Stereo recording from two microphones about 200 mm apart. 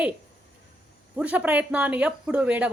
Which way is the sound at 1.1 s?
5° right (ahead or behind).